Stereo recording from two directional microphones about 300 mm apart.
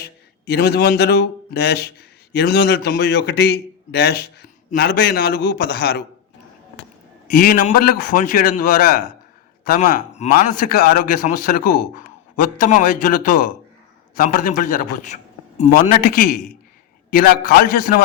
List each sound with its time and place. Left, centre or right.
0.0 s a man's voice: left
7.3 s a man's voice: left